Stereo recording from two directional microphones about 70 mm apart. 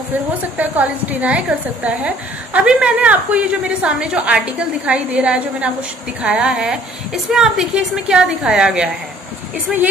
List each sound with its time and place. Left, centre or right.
0.6 s a woman's voice: right
6.5 s a woman's voice: centre